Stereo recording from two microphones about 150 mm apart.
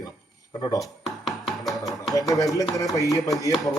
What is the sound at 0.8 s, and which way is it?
Music, centre (ahead or behind).